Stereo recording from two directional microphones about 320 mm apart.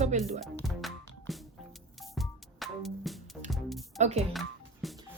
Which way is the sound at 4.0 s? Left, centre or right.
Right.